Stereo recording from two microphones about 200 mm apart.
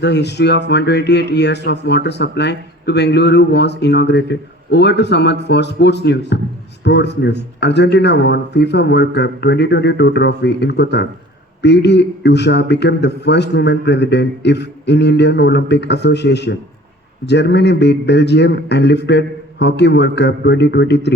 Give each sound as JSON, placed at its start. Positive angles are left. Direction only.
{"t": 0.0, "sound": "a man's voice", "side_deg": 60}